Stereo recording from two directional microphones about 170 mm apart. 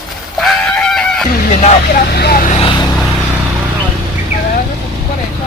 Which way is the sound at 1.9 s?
70° left (ahead or behind).